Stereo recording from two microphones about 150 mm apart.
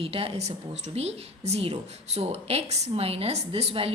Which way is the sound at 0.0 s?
40° right (ahead or behind).